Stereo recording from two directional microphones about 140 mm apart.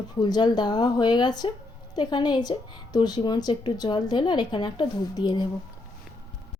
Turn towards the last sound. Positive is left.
turn(degrees=30)  # may be behind; listen again after turning